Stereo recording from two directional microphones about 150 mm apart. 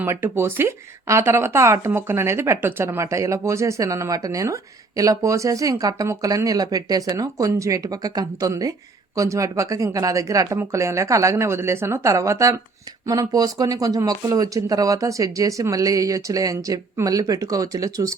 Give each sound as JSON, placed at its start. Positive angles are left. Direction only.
{"t": 0.0, "sound": "speech", "side_deg": -15}